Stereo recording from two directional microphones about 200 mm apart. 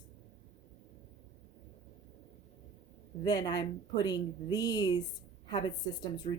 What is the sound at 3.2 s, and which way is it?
Speech, 20° left (ahead or behind).